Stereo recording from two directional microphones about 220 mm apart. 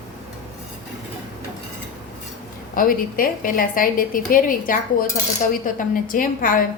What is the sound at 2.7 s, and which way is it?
A woman's voice, 40° left (ahead or behind).